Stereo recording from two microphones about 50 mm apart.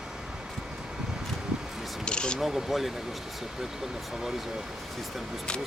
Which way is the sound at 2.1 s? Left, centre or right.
Centre.